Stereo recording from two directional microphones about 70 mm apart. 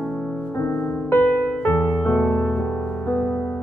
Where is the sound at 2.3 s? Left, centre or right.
Left.